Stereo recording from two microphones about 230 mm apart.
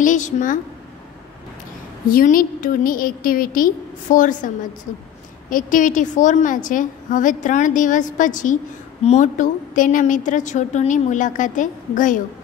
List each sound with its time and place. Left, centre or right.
0.0 s a woman's voice: left
2.0 s a woman's voice: left
5.5 s a woman's voice: left